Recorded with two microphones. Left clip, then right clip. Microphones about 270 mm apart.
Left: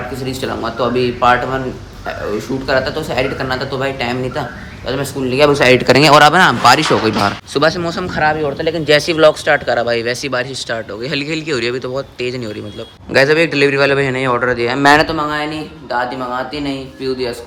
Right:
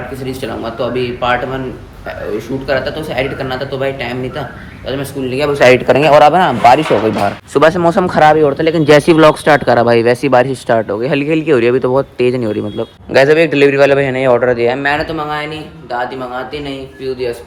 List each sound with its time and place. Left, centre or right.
0.3 s speech: centre
2.6 s speech: centre
8.2 s speech: right
8.5 s speech: centre
16.6 s speech: centre